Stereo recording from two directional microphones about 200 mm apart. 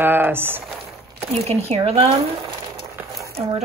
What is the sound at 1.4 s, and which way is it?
Speech, 30° right (ahead or behind).